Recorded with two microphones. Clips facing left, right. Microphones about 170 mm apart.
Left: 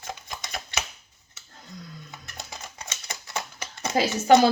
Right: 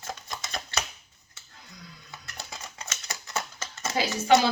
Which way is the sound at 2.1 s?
20° left (ahead or behind).